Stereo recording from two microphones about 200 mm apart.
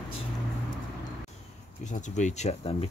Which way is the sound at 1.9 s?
35° left (ahead or behind).